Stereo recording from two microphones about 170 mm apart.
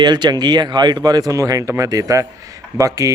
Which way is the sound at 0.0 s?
25° right (ahead or behind).